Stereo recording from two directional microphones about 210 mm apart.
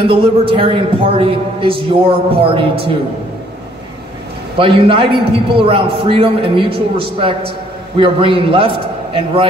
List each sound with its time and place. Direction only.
0.0 s a man's voice: 25° right (ahead or behind)
4.6 s a man's voice: 25° right (ahead or behind)